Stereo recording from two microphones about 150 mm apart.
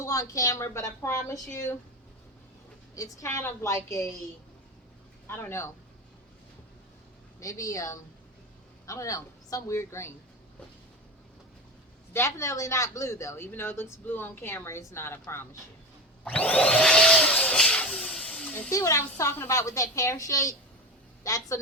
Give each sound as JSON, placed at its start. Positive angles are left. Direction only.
{"t": 0.0, "sound": "a woman's voice", "side_deg": 20}
{"t": 2.9, "sound": "a woman's voice", "side_deg": 20}
{"t": 5.3, "sound": "speech", "side_deg": 15}
{"t": 7.3, "sound": "a woman's voice", "side_deg": 20}
{"t": 12.1, "sound": "speech", "side_deg": 20}
{"t": 16.2, "sound": "vacuum cleaner", "side_deg": 10}
{"t": 18.7, "sound": "a woman's voice", "side_deg": 20}